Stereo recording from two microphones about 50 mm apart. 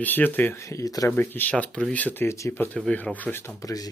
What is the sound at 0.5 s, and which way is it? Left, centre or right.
Speech, left.